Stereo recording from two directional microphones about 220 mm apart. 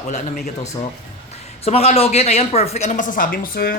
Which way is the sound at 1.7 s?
25° left (ahead or behind).